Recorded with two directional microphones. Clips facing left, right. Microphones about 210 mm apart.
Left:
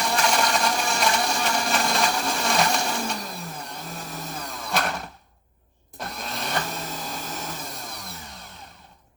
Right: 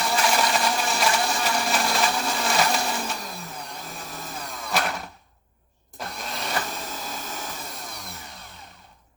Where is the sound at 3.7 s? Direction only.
Centre (ahead or behind).